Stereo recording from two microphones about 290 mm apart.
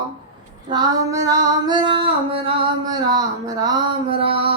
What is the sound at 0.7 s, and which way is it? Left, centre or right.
Female singing, centre.